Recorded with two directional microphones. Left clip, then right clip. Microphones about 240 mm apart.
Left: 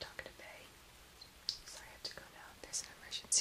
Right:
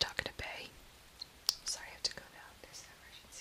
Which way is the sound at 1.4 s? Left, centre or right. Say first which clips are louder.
Right 7 dB; centre.